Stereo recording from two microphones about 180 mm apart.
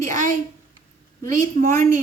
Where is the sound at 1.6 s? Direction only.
45° right (ahead or behind).